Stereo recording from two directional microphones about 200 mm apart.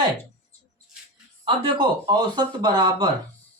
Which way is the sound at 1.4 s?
25° right (ahead or behind).